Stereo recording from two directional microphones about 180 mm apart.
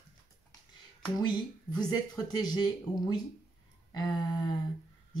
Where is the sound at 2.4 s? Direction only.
25° left (ahead or behind).